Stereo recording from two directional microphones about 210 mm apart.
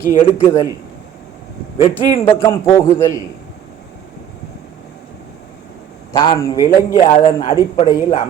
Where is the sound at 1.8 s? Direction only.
25° left (ahead or behind).